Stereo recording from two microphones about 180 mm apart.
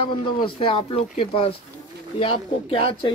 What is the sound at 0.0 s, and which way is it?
Speech, 30° left (ahead or behind).